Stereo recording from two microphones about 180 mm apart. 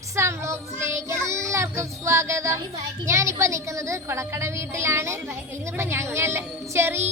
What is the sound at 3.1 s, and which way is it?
A woman's voice, 15° right (ahead or behind).